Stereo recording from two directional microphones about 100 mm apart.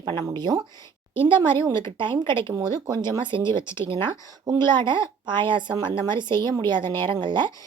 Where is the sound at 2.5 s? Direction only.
40° right (ahead or behind); by 4.1 s 55° right (ahead or behind).